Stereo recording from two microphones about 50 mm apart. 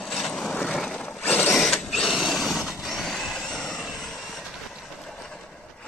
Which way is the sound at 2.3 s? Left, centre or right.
Centre.